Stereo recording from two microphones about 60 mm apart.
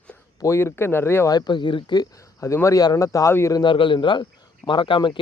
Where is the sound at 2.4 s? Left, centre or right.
Left.